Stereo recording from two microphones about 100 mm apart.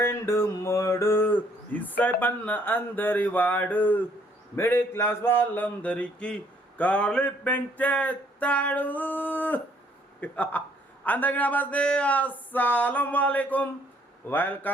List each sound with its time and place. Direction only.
0.0 s speech: 25° left (ahead or behind)
4.5 s a sound: 25° left (ahead or behind)
14.3 s speech: 20° left (ahead or behind)